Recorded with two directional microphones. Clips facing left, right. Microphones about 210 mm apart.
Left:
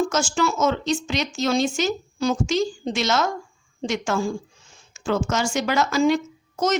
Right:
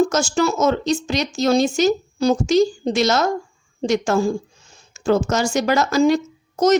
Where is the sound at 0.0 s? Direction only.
40° right (ahead or behind).